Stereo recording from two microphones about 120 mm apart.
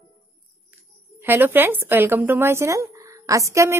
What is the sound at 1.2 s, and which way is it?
Speech, 15° right (ahead or behind).